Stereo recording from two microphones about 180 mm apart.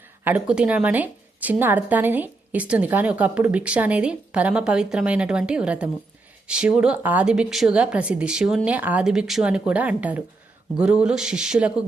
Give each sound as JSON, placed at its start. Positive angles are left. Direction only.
{"t": 0.3, "sound": "a woman's voice", "side_deg": -5}